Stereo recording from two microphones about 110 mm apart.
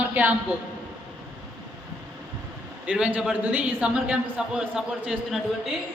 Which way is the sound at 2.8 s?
10° right (ahead or behind).